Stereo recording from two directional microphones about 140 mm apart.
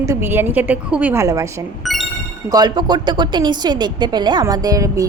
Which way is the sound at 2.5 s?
30° right (ahead or behind).